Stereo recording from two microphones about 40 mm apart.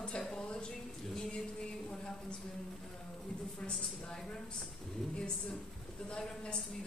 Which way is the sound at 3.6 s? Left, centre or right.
Left.